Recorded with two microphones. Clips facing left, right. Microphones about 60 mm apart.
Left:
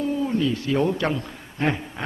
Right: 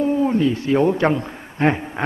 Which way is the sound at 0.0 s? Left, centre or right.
Right.